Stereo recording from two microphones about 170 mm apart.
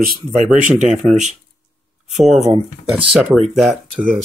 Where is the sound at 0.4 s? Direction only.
45° right (ahead or behind).